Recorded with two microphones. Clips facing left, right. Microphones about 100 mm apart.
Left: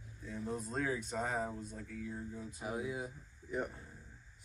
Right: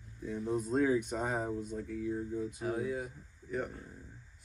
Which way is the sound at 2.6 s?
15° left (ahead or behind).